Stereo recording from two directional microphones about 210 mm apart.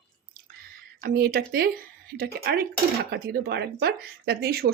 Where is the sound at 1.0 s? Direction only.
45° right (ahead or behind).